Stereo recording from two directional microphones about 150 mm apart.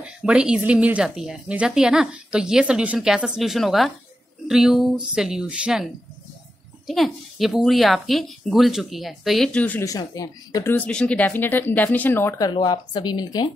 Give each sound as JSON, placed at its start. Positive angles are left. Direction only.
{"t": 0.0, "sound": "speech", "side_deg": -5}
{"t": 6.9, "sound": "speech", "side_deg": 0}
{"t": 9.8, "sound": "speech", "side_deg": 25}
{"t": 10.9, "sound": "speech", "side_deg": 5}
{"t": 12.4, "sound": "speech", "side_deg": 30}